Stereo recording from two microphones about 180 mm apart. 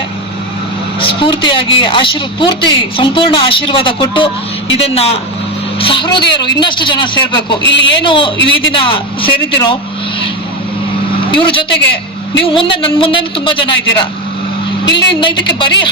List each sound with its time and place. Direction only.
1.0 s a woman's voice: 30° left (ahead or behind)
7.6 s a man's voice: 90° left
8.0 s a woman's voice: 25° left (ahead or behind)
11.3 s a woman's voice: 30° left (ahead or behind)
14.8 s a woman's voice: 75° left (ahead or behind)
15.1 s a woman's voice: 25° left (ahead or behind)